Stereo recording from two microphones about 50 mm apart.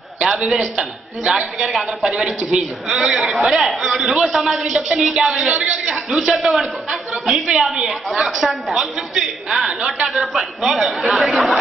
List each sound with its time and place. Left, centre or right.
0.2 s a woman's voice: centre
2.0 s a man's voice: centre
6.1 s a woman's voice: centre
10.0 s speech: centre